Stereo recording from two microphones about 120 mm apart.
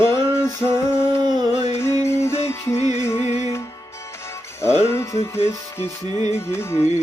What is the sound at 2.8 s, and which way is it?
Music, 65° left (ahead or behind).